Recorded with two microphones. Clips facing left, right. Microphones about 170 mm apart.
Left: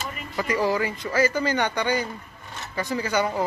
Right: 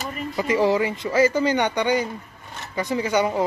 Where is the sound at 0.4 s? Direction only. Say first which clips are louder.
Right 4 dB; 25° right (ahead or behind).